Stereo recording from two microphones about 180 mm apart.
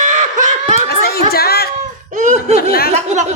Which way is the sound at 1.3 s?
60° left (ahead or behind).